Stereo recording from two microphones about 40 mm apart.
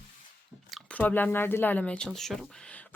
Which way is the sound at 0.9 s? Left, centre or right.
Left.